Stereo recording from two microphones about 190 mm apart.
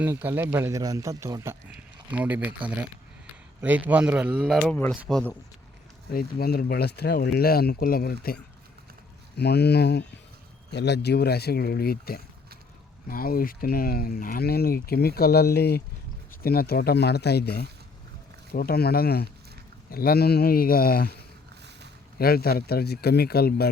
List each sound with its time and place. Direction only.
0.0 s speech: 10° right (ahead or behind)
3.6 s a man's voice: 10° right (ahead or behind)
6.1 s speech: 55° left (ahead or behind)
9.4 s speech: 60° left (ahead or behind)
22.2 s speech: 55° left (ahead or behind)